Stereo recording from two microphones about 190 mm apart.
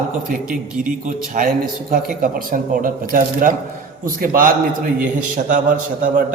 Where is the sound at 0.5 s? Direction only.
45° right (ahead or behind).